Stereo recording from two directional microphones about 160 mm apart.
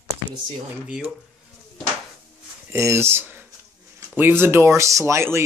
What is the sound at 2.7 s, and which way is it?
Speech, 15° right (ahead or behind).